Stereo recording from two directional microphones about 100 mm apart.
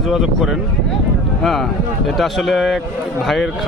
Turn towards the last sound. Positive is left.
turn(degrees=0)  # may be behind; listen again after turning